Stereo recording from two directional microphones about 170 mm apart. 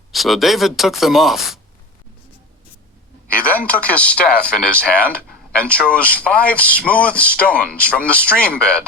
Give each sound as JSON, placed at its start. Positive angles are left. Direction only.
{"t": 0.1, "sound": "speech", "side_deg": 0}
{"t": 3.3, "sound": "speech", "side_deg": 55}
{"t": 3.7, "sound": "speech", "side_deg": 10}